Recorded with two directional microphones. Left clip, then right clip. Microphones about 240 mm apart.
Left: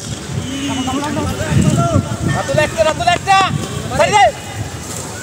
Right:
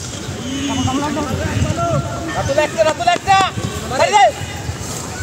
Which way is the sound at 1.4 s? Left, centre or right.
Left.